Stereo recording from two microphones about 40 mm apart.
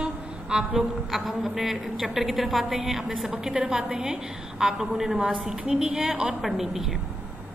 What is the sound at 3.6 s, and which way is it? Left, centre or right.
Speech, right.